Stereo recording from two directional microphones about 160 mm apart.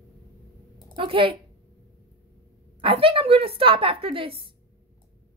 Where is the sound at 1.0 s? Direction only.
35° right (ahead or behind).